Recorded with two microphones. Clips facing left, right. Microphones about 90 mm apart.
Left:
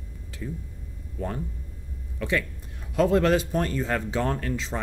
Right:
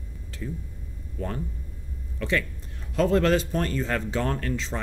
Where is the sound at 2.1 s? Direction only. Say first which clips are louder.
Even; 10° left (ahead or behind).